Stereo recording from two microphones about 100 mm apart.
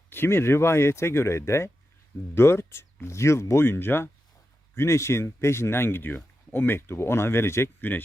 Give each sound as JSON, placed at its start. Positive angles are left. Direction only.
{"t": 0.1, "sound": "speech", "side_deg": 25}